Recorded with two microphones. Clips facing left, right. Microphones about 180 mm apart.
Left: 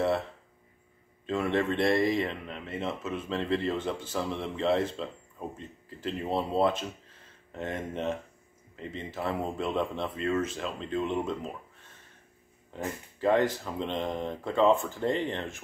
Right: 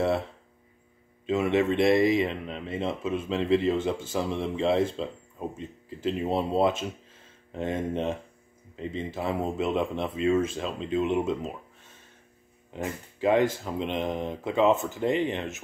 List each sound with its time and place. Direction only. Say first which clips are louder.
1.2 s speech: right 4 dB; 10° right (ahead or behind)
7.7 s speech: right 5 dB; 25° right (ahead or behind)
8.7 s speech: right 4 dB; 15° right (ahead or behind)
12.7 s speech: right 2 dB; 15° right (ahead or behind)